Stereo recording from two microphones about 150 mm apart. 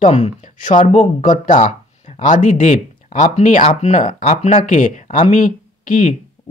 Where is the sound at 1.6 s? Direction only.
50° left (ahead or behind).